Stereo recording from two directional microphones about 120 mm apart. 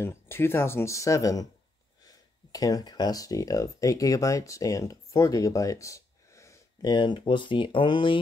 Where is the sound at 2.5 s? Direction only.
30° left (ahead or behind).